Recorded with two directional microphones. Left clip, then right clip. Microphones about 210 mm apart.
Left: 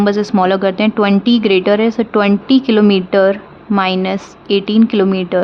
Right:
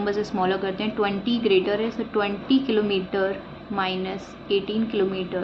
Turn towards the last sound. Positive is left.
turn(degrees=55)  # may be behind; listen again after turning